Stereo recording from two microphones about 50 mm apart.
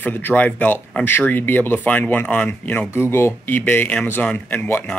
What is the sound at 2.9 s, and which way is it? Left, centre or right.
Speech, left.